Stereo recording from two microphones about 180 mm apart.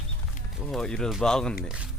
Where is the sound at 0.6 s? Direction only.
5° left (ahead or behind).